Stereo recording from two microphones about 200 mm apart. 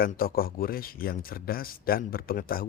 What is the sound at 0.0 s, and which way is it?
Speech, 45° left (ahead or behind).